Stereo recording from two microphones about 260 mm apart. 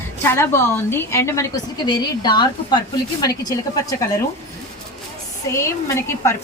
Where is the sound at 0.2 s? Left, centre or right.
Centre.